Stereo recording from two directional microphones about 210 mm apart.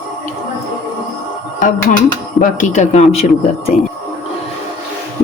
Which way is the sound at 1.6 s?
40° left (ahead or behind).